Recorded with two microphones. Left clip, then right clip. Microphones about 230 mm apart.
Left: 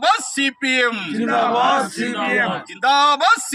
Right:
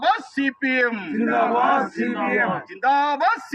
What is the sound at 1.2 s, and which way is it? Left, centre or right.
Speech, centre.